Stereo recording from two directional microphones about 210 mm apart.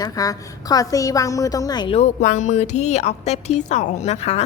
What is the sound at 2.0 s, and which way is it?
A woman's voice, 35° left (ahead or behind).